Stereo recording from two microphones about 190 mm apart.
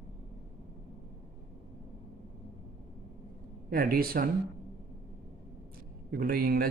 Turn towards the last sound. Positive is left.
turn(degrees=-50)  # may be behind; listen again after turning